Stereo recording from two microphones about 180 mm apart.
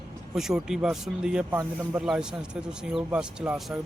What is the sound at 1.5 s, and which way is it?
Speech, 15° right (ahead or behind).